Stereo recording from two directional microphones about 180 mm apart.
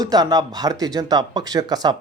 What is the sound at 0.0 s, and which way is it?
Speech, 20° right (ahead or behind).